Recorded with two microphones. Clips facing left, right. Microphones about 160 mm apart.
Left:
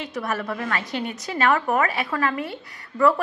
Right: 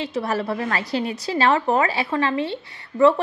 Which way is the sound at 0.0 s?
30° right (ahead or behind).